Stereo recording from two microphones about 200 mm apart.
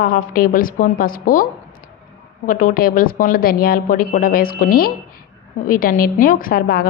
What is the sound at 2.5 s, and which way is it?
A woman's voice, 45° left (ahead or behind).